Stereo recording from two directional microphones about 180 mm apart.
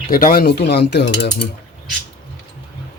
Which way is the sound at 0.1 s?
50° left (ahead or behind).